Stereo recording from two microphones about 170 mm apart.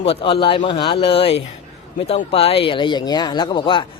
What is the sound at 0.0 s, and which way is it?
Speech, 30° left (ahead or behind).